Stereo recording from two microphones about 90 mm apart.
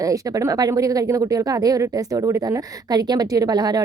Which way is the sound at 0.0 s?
40° right (ahead or behind).